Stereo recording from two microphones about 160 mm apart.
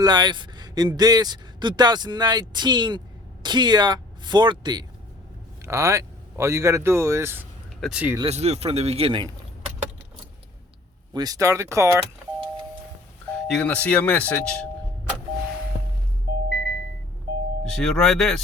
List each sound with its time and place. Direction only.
0.0 s speech: 25° right (ahead or behind)
7.8 s speech: 5° right (ahead or behind)
8.2 s a man's voice: 40° right (ahead or behind)
11.1 s speech: 25° right (ahead or behind)
13.3 s doorbell: 5° left (ahead or behind)
13.8 s speech: 10° left (ahead or behind)
16.5 s a sound: 90° right
17.7 s speech: centre (ahead or behind)